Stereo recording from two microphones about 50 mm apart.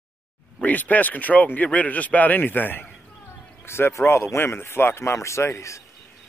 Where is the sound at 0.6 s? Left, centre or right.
Left.